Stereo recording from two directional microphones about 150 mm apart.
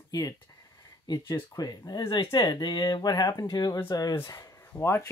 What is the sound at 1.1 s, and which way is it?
Speech, 30° left (ahead or behind).